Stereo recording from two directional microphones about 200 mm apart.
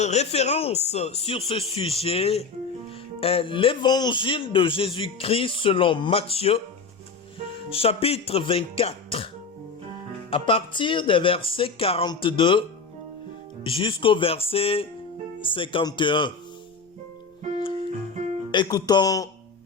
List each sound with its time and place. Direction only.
0.0 s a man's voice: 35° left (ahead or behind)
7.7 s a man's voice: 30° left (ahead or behind)
13.7 s a man's voice: 25° left (ahead or behind)
18.5 s a man's voice: 20° left (ahead or behind)